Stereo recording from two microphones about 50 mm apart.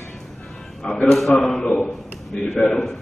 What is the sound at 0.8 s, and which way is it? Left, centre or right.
A man's voice, centre.